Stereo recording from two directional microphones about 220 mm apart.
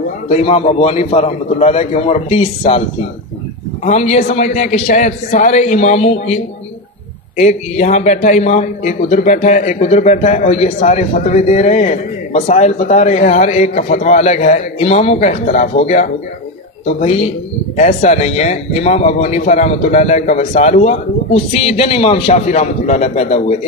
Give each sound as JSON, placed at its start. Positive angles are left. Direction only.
{"t": 0.3, "sound": "speech", "side_deg": 30}
{"t": 3.8, "sound": "a man's voice", "side_deg": 30}